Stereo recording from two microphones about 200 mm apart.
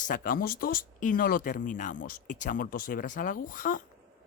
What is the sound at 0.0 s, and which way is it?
Speech, 45° left (ahead or behind).